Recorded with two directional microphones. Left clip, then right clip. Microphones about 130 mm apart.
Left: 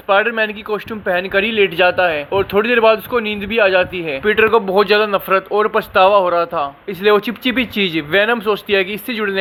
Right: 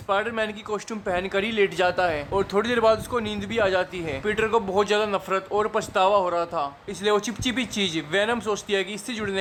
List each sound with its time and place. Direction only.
0.1 s speech: 15° left (ahead or behind)